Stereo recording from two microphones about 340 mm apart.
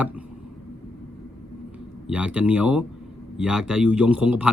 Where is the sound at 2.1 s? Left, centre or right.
Centre.